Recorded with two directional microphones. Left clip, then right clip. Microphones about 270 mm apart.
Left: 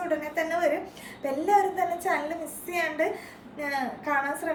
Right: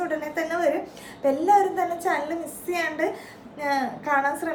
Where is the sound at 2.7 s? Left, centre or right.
Centre.